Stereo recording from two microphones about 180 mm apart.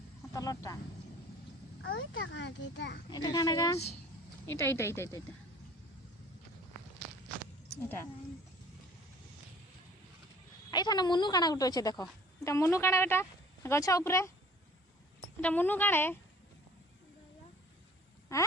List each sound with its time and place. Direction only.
0.3 s a woman's voice: 20° left (ahead or behind)
1.8 s a child's voice: 90° left; by 3.0 s 70° left (ahead or behind)
3.1 s a woman's voice: 20° left (ahead or behind)
10.7 s a woman's voice: 20° left (ahead or behind)
15.4 s speech: 10° left (ahead or behind)
18.3 s speech: 15° left (ahead or behind)